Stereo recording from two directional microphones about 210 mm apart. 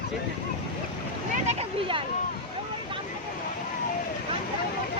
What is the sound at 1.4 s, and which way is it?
Speech, 25° right (ahead or behind).